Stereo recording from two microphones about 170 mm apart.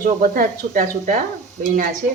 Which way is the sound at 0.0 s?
55° right (ahead or behind).